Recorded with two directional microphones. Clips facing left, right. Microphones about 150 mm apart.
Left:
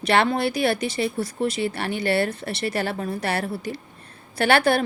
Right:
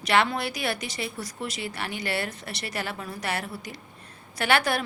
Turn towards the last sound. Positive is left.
turn(degrees=30)  # may be behind; listen again after turning